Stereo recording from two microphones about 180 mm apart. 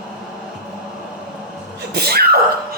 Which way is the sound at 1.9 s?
60° right (ahead or behind).